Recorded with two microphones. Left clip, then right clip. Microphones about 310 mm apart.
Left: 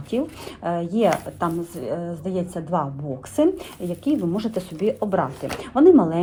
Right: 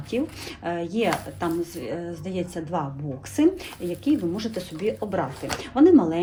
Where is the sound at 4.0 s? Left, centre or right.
Centre.